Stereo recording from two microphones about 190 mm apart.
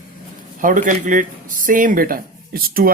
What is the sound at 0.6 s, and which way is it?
Speech, 45° right (ahead or behind).